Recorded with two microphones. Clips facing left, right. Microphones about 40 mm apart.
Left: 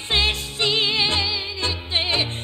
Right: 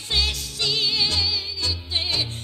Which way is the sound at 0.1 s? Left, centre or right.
Left.